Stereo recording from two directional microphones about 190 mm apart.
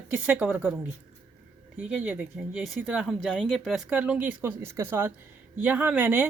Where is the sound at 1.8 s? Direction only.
5° right (ahead or behind).